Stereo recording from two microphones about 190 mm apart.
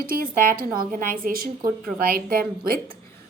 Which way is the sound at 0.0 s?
50° right (ahead or behind).